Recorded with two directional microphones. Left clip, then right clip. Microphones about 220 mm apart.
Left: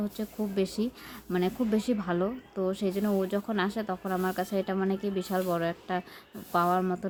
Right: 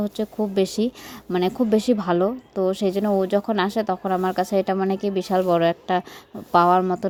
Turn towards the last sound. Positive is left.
turn(degrees=-30)  # may be behind; listen again after turning